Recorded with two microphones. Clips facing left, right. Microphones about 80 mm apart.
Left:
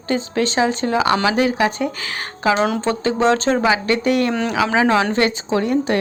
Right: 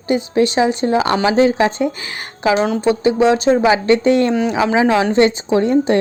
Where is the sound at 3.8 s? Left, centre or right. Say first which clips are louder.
Right 5 dB; right.